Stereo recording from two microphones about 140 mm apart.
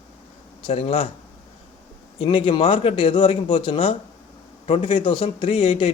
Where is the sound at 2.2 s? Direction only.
40° left (ahead or behind).